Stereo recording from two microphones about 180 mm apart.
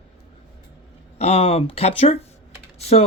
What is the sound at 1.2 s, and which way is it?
Speech, 35° left (ahead or behind).